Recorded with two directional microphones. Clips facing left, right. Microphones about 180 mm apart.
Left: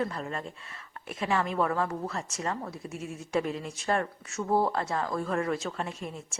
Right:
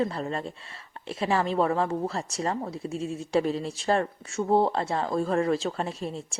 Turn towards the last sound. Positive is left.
turn(degrees=-30)  # may be behind; listen again after turning